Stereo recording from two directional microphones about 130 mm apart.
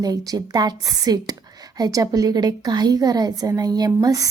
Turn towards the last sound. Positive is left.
turn(degrees=-30)  # may be behind; listen again after turning